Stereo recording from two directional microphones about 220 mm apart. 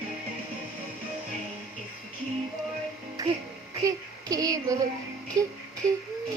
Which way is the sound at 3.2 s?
15° right (ahead or behind).